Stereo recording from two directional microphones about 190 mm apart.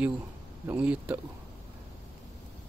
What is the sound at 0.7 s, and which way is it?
Speech, 5° right (ahead or behind).